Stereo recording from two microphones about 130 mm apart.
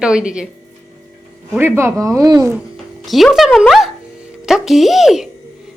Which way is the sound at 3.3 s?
Centre (ahead or behind).